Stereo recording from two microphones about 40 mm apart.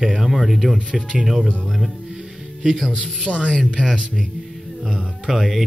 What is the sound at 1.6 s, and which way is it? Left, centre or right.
Speech, centre.